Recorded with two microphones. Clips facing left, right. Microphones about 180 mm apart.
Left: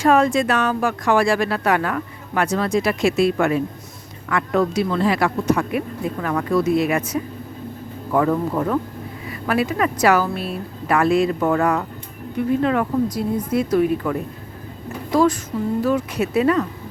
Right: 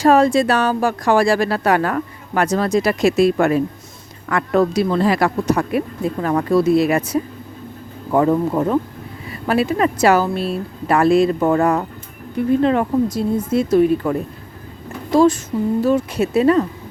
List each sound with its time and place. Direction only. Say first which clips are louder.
0.0 s speech: right 3 dB; 35° right (ahead or behind)
15.1 s a sound: right 4 dB; 25° right (ahead or behind)
15.8 s speech: right 3 dB; 25° right (ahead or behind)